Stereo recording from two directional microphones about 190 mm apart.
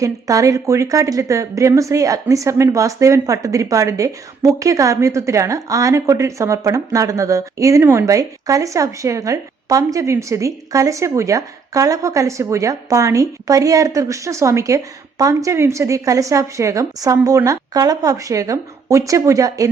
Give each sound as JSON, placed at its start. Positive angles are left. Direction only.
{"t": 0.0, "sound": "a woman's voice", "side_deg": -15}